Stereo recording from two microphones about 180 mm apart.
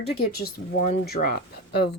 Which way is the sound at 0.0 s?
55° left (ahead or behind).